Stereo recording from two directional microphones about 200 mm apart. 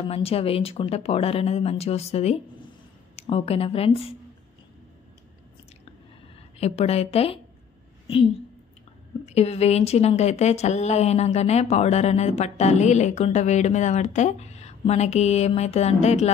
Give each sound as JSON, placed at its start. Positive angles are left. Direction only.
{"t": 0.1, "sound": "speech", "side_deg": 30}
{"t": 6.6, "sound": "speech", "side_deg": 30}
{"t": 9.2, "sound": "speech", "side_deg": 30}